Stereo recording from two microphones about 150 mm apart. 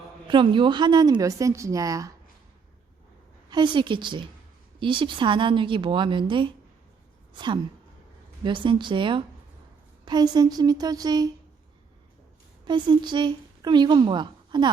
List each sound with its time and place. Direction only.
0.3 s a woman's voice: 35° right (ahead or behind)
3.5 s a woman's voice: 30° right (ahead or behind)
12.6 s a woman's voice: 30° right (ahead or behind)